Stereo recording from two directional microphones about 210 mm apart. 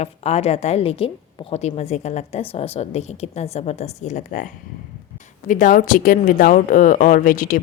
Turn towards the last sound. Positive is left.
turn(degrees=40)  # may be behind; listen again after turning